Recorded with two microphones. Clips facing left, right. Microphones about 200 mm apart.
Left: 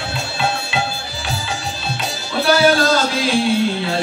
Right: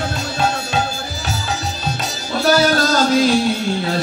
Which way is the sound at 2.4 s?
45° right (ahead or behind).